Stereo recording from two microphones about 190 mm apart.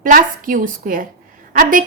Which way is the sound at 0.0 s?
45° right (ahead or behind).